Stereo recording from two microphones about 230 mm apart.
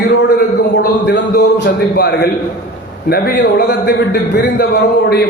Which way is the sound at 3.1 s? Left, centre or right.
Left.